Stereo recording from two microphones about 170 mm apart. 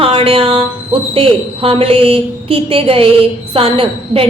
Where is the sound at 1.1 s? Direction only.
35° right (ahead or behind).